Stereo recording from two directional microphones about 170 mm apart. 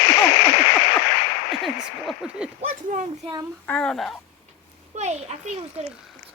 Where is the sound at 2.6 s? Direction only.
50° right (ahead or behind).